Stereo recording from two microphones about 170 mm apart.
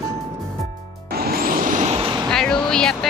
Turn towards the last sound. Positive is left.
turn(degrees=5)  # may be behind; listen again after turning